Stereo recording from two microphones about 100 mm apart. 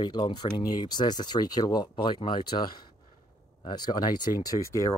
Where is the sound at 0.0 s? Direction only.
45° left (ahead or behind).